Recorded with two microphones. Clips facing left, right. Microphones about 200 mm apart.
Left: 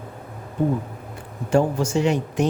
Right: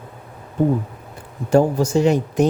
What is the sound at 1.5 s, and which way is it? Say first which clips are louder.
Speech: right 4 dB; 40° right (ahead or behind).